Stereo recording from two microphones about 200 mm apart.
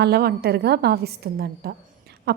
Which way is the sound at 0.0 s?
50° right (ahead or behind).